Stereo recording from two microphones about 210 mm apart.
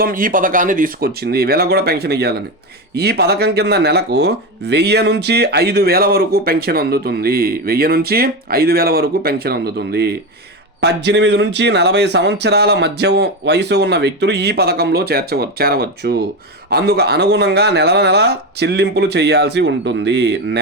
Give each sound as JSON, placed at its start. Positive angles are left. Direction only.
{"t": 0.0, "sound": "speech", "side_deg": -40}